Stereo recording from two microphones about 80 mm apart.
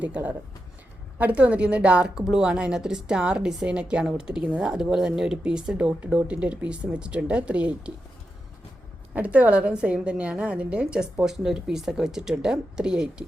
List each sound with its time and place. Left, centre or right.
0.0 s a woman's voice: centre
9.1 s a woman's voice: centre